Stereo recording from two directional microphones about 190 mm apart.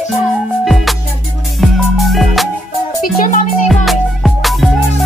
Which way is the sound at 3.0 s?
45° left (ahead or behind).